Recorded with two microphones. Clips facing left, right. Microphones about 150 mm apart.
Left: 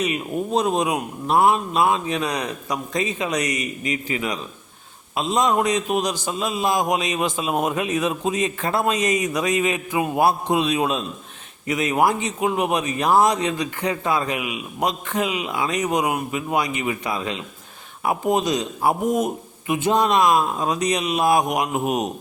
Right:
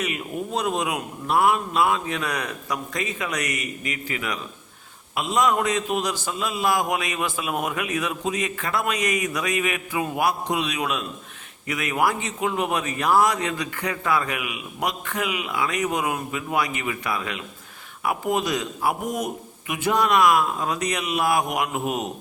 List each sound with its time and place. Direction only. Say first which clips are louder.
0.0 s a man's voice: left 4 dB; 20° left (ahead or behind)